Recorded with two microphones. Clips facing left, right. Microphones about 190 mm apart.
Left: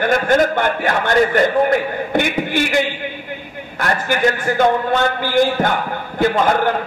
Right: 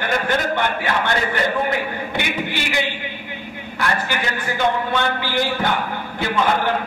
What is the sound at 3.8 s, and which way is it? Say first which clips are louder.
A man's voice: left 5 dB; 45° left (ahead or behind).